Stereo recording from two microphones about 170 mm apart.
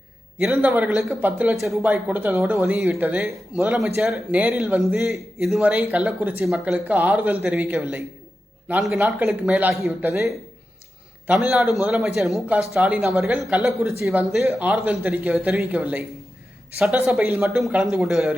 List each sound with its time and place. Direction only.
0.3 s speech: 5° right (ahead or behind)
11.3 s speech: 5° right (ahead or behind)
17.1 s speech: 10° right (ahead or behind)